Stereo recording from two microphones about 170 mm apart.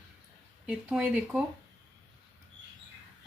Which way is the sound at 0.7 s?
5° right (ahead or behind).